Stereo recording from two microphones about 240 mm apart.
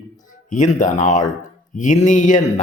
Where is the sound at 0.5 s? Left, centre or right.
Left.